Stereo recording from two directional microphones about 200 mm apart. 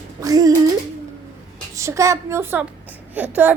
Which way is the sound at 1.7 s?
15° right (ahead or behind).